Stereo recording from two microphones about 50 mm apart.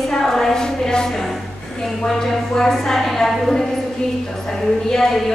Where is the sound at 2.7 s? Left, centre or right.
Centre.